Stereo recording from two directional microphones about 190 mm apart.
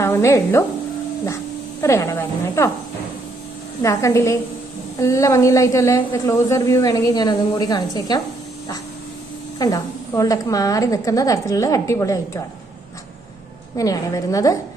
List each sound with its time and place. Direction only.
0.0 s speech: 15° left (ahead or behind)
1.8 s a woman's voice: 15° left (ahead or behind)
3.8 s a woman's voice: 15° left (ahead or behind)
9.6 s a woman's voice: 20° left (ahead or behind)
13.7 s a woman's voice: 20° left (ahead or behind)